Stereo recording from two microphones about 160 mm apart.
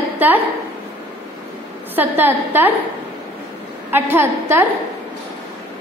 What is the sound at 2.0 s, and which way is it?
Speech, 10° right (ahead or behind).